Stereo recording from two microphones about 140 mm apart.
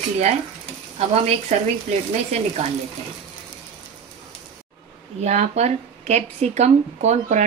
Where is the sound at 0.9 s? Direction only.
45° right (ahead or behind).